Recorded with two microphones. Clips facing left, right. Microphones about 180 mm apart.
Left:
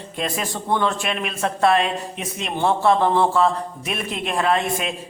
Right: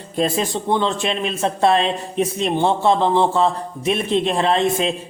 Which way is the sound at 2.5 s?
20° right (ahead or behind).